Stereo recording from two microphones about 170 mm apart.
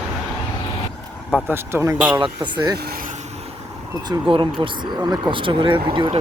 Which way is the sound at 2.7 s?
65° right (ahead or behind).